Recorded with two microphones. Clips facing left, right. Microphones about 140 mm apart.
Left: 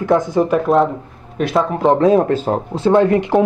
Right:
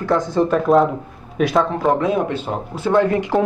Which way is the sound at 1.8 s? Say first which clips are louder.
Left 5 dB; 35° left (ahead or behind).